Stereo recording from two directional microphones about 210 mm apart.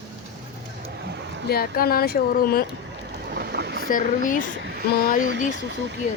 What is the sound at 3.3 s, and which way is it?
Boat, 50° right (ahead or behind).